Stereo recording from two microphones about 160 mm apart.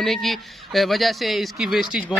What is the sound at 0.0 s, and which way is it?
Speech, centre (ahead or behind).